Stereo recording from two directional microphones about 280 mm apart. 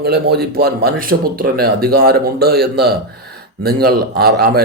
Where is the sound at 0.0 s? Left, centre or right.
Right.